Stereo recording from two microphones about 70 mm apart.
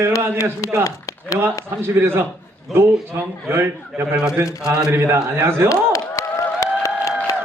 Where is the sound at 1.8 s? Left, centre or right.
Right.